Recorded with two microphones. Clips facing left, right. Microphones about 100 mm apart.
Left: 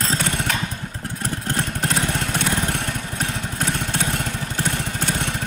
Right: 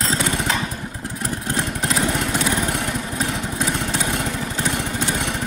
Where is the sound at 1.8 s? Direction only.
30° right (ahead or behind).